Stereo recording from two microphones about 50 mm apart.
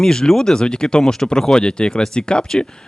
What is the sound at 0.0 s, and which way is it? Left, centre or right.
Speech, centre.